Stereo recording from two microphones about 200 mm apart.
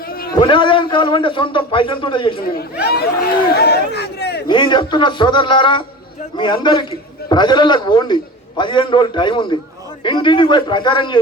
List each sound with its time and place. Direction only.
0.1 s a sound: 50° left (ahead or behind)
0.3 s a man's voice: 25° left (ahead or behind)
2.8 s speech: 50° left (ahead or behind)
4.4 s a man's voice: 25° left (ahead or behind)